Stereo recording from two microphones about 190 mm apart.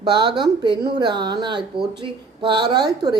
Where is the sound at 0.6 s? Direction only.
20° right (ahead or behind).